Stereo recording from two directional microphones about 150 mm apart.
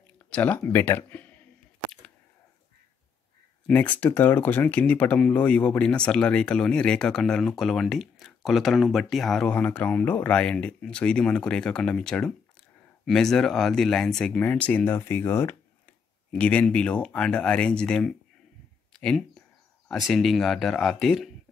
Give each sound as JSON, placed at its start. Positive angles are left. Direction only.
{"t": 0.3, "sound": "speech", "side_deg": 10}
{"t": 3.6, "sound": "speech", "side_deg": 10}